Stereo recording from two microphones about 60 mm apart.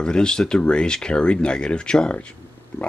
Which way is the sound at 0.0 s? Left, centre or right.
Centre.